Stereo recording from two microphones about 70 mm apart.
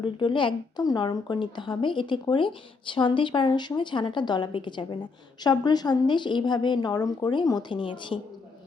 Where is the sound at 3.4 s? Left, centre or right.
Left.